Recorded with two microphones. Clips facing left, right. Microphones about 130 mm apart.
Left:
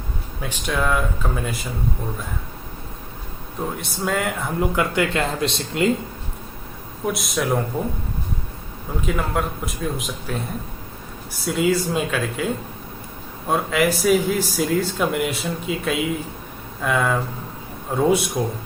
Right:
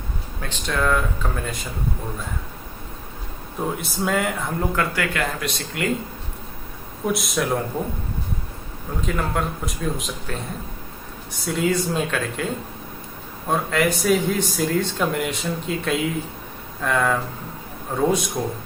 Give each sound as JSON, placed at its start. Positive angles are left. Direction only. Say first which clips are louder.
{"t": 0.3, "sound": "speech", "louder": "left 1 dB", "side_deg": 10}
{"t": 3.8, "sound": "a man's voice", "louder": "even", "side_deg": 0}
{"t": 4.7, "sound": "speech", "louder": "left 3 dB", "side_deg": 20}
{"t": 7.1, "sound": "a man's voice", "louder": "even", "side_deg": 0}
{"t": 9.0, "sound": "a man's voice", "louder": "left 1 dB", "side_deg": 5}
{"t": 11.4, "sound": "a man's voice", "louder": "left 2 dB", "side_deg": 5}
{"t": 13.5, "sound": "a man's voice", "louder": "left 1 dB", "side_deg": 5}